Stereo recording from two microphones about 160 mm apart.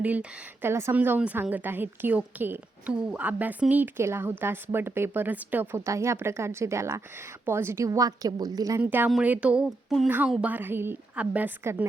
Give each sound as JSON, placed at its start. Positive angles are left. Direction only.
{"t": 0.0, "sound": "a woman's voice", "side_deg": -10}
{"t": 8.8, "sound": "a woman's voice", "side_deg": -10}